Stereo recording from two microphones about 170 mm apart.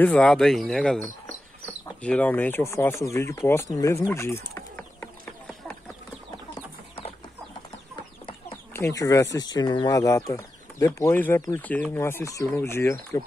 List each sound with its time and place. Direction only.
0.0 s speech: 5° left (ahead or behind)
8.7 s speech: 20° left (ahead or behind)